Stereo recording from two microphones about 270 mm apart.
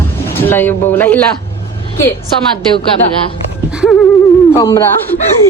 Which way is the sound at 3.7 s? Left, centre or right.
Centre.